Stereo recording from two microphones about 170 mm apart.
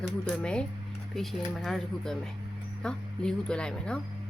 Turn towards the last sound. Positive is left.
turn(degrees=5)  # may be behind; listen again after turning